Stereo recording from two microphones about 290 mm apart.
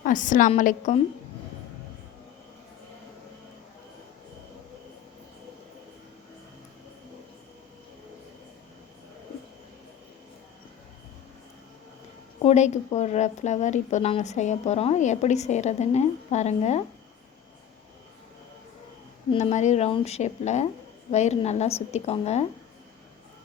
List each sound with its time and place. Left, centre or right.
0.0 s a woman's voice: left
12.4 s a woman's voice: left
19.3 s a woman's voice: left